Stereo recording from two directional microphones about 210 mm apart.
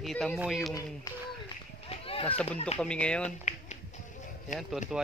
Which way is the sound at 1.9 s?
25° left (ahead or behind).